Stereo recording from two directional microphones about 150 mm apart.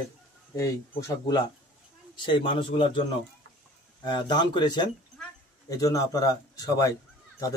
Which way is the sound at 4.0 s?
30° left (ahead or behind).